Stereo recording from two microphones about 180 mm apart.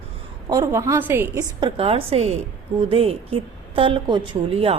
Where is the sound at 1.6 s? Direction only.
30° right (ahead or behind).